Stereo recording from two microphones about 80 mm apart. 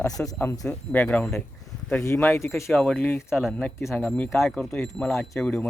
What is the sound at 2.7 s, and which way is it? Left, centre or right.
Speech, centre.